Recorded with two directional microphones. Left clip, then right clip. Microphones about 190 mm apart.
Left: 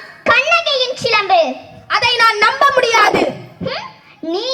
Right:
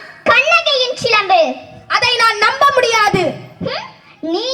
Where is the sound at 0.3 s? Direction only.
35° right (ahead or behind).